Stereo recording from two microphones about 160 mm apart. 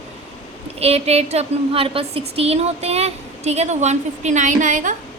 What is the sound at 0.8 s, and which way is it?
A woman's voice, 40° right (ahead or behind).